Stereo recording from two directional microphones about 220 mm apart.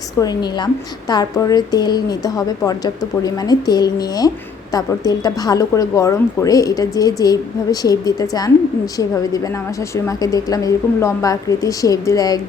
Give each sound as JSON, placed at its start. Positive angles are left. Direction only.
{"t": 0.2, "sound": "a woman's voice", "side_deg": 20}